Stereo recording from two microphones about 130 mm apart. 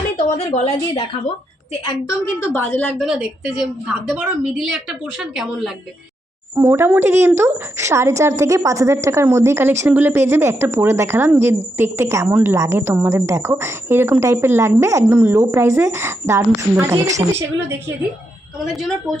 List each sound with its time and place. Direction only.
0.3 s a woman's voice: 55° left (ahead or behind)
2.0 s a woman's voice: 15° left (ahead or behind)
3.0 s a woman's voice: 5° right (ahead or behind)
6.6 s a woman's voice: 20° right (ahead or behind)
18.7 s a woman's voice: 5° left (ahead or behind)